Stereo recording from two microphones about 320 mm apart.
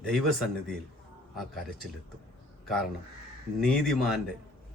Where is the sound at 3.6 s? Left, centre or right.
Centre.